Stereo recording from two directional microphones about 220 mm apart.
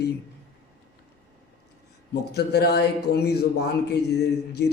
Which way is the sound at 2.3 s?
50° left (ahead or behind).